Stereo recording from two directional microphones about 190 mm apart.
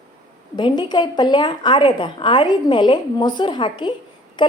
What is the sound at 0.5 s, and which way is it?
A woman's voice, 25° left (ahead or behind).